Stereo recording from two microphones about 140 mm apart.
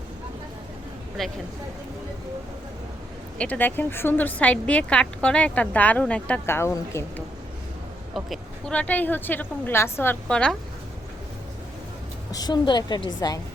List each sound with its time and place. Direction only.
1.2 s speech: centre (ahead or behind)
3.3 s speech: 10° left (ahead or behind)
8.1 s speech: 5° left (ahead or behind)
12.3 s a woman's voice: 30° left (ahead or behind)